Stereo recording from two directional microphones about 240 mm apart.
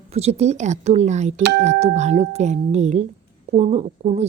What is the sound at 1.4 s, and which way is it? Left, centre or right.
Speech, right.